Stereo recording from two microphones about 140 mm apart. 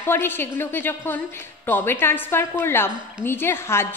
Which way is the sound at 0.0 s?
15° left (ahead or behind).